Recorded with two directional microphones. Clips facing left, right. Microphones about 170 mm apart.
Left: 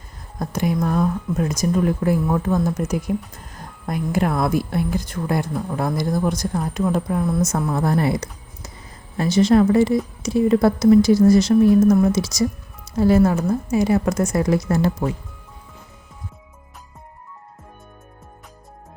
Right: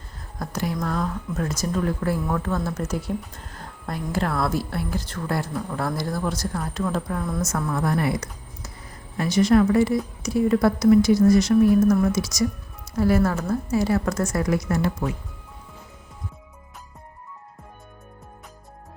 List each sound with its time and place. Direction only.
0.3 s a woman's voice: 20° left (ahead or behind)